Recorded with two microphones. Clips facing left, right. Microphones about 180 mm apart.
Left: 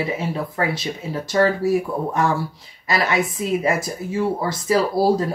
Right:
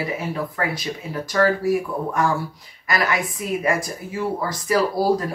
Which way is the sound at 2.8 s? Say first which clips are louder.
Left 2 dB; 25° left (ahead or behind).